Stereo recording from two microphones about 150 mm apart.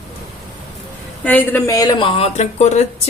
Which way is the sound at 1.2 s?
10° left (ahead or behind).